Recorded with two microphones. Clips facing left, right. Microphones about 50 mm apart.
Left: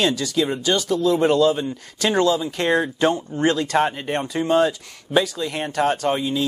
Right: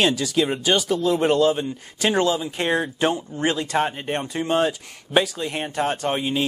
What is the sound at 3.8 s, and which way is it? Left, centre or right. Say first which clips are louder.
Speech: left 2 dB; centre.